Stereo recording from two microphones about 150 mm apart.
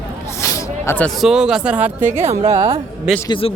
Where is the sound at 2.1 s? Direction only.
45° right (ahead or behind).